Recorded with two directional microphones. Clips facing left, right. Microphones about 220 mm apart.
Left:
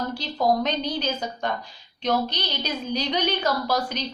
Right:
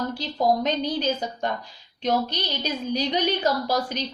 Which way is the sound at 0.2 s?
45° right (ahead or behind).